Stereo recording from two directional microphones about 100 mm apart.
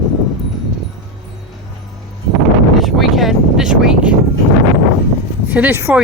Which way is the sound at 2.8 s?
Centre (ahead or behind).